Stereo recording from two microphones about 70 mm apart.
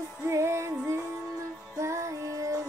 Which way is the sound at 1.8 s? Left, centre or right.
Right.